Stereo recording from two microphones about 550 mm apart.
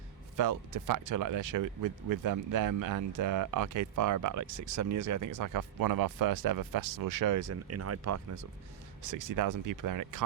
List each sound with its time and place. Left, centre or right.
0.3 s speech: right